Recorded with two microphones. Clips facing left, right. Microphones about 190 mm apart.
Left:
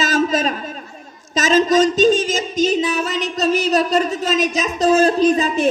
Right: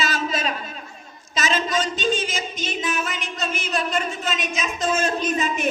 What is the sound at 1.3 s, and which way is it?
A woman's voice, 40° left (ahead or behind).